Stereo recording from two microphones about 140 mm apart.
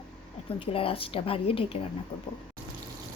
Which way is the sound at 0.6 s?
40° left (ahead or behind).